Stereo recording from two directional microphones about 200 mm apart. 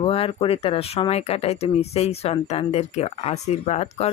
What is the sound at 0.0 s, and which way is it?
Speech, 30° left (ahead or behind).